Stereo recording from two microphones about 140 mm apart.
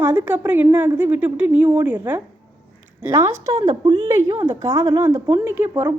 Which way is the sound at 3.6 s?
40° right (ahead or behind).